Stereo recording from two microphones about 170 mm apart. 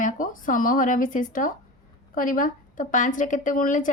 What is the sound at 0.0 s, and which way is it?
A woman's voice, 50° left (ahead or behind).